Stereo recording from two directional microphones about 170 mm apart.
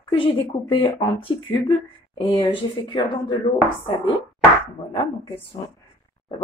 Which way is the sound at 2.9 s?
30° left (ahead or behind).